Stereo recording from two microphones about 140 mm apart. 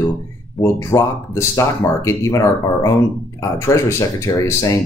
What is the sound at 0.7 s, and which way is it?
Speech, 20° left (ahead or behind).